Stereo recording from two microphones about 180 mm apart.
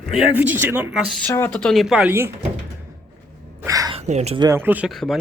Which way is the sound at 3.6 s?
20° right (ahead or behind).